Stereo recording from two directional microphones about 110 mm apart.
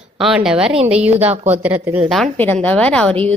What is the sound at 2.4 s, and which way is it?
Speech, 15° left (ahead or behind).